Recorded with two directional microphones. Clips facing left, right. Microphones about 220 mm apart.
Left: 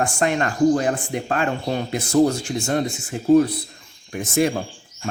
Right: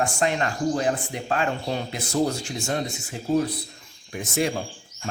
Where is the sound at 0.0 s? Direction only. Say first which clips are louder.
Left 3 dB; 55° left (ahead or behind).